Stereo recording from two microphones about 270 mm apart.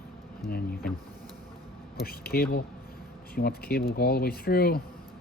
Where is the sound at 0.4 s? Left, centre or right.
Left.